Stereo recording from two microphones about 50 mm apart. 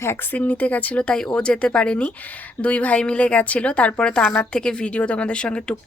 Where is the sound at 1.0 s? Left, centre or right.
Centre.